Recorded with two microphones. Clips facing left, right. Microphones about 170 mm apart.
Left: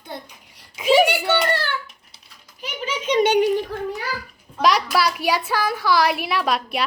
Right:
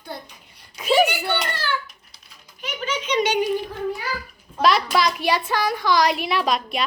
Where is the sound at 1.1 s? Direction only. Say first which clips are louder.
Left 5 dB; 70° left (ahead or behind).